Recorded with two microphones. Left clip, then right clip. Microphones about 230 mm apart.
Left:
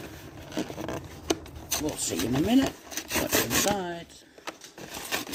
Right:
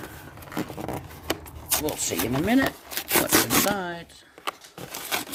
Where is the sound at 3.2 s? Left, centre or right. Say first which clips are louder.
Right 2 dB; centre.